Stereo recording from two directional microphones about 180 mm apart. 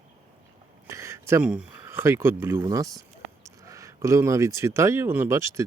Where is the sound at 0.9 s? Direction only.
15° right (ahead or behind).